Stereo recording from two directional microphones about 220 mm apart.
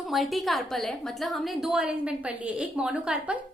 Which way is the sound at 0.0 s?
Centre (ahead or behind).